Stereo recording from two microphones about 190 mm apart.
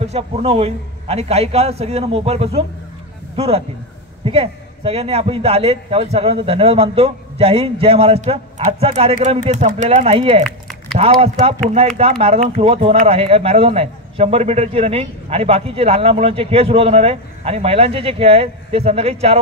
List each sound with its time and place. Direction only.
0.0 s speech: 35° right (ahead or behind)
10.4 s a sound: centre (ahead or behind)
11.0 s speech: 30° right (ahead or behind)